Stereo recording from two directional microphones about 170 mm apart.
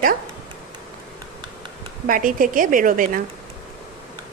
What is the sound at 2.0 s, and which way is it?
A woman's voice, 55° right (ahead or behind).